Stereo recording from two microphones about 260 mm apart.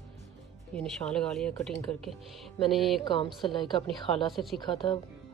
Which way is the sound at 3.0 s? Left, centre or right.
Centre.